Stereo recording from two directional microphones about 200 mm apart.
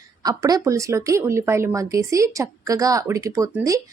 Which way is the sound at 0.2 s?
20° right (ahead or behind).